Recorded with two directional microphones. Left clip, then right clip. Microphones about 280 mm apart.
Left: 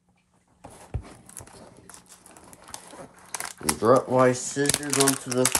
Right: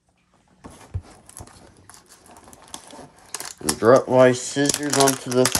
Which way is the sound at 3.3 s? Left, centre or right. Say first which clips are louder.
Right 2 dB; right.